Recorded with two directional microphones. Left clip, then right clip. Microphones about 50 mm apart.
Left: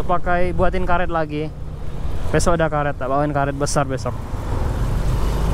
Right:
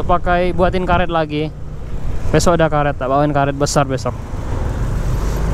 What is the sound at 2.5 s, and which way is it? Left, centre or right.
Speech, right.